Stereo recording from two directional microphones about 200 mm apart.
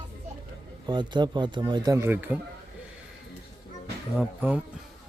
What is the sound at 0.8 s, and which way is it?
Speech, 20° right (ahead or behind).